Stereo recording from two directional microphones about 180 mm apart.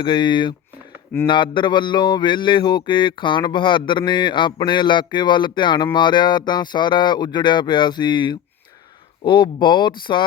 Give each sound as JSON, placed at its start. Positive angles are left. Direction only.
{"t": 0.0, "sound": "mantra", "side_deg": 25}